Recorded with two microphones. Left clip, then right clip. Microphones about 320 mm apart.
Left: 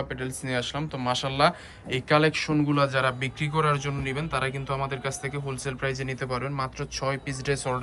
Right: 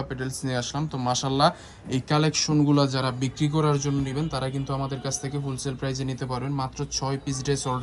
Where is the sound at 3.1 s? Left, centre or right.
Centre.